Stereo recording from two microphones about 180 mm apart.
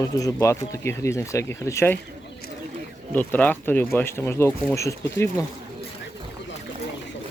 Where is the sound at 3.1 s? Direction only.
10° left (ahead or behind).